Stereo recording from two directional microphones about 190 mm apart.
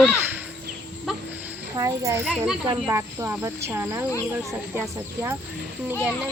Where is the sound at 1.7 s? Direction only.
15° right (ahead or behind).